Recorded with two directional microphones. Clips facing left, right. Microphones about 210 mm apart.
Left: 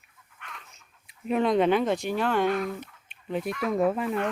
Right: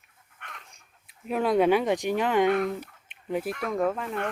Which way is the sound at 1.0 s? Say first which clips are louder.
Left 2 dB; centre (ahead or behind).